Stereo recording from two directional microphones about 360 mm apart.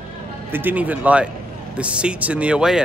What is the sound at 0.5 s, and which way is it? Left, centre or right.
Speech, centre.